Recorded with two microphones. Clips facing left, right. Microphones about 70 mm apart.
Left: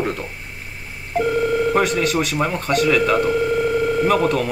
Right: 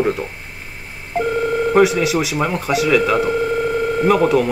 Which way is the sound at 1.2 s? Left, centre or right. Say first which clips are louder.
Even; centre.